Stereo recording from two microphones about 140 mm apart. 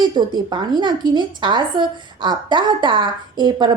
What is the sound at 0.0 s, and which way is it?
A woman's voice, 30° right (ahead or behind).